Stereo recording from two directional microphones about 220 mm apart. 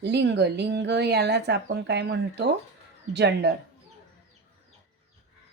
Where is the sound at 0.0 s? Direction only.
50° right (ahead or behind).